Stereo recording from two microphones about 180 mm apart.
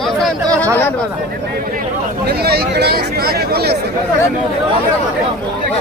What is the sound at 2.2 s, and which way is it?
Speech, 60° right (ahead or behind).